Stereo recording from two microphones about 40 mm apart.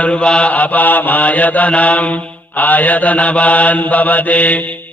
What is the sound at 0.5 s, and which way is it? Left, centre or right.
Mantra, left.